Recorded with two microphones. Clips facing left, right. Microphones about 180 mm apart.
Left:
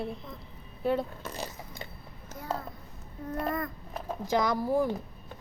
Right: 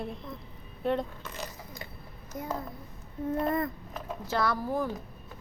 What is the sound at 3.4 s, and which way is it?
Speech, 25° right (ahead or behind).